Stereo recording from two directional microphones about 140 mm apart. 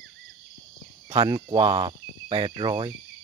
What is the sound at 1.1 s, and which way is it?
Speech, 30° right (ahead or behind).